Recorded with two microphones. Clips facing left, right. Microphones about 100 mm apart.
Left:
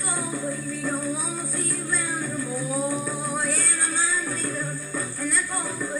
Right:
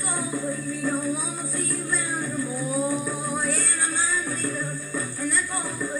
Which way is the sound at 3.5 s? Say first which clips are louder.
Even; 5° left (ahead or behind).